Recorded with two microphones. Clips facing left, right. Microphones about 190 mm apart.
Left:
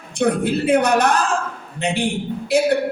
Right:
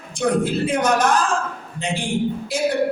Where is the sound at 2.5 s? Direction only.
65° left (ahead or behind).